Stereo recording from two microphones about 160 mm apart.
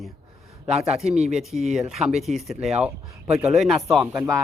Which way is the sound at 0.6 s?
40° right (ahead or behind).